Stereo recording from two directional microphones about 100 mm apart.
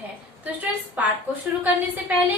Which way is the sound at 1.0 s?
15° right (ahead or behind).